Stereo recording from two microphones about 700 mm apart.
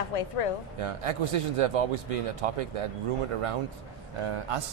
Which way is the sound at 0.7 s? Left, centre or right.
Right.